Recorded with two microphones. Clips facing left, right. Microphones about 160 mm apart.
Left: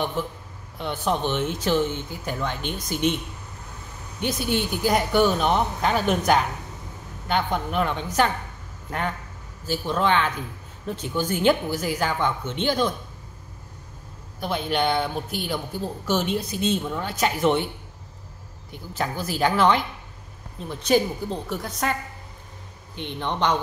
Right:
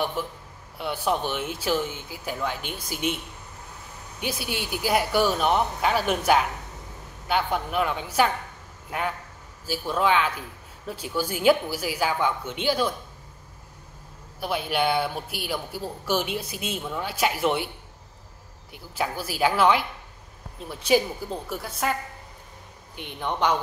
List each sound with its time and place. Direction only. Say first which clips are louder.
0.2 s speech: left 2 dB; 10° right (ahead or behind)
4.2 s a woman's voice: left 6 dB; 5° right (ahead or behind)
9.7 s speech: left 1 dB; 5° right (ahead or behind)
14.4 s speech: left 1 dB; 5° right (ahead or behind)
18.7 s speech: left 1 dB; 10° right (ahead or behind)
22.9 s speech: left 1 dB; 10° right (ahead or behind)